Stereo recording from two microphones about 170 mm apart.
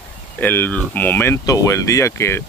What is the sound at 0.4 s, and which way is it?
Speech, 10° left (ahead or behind).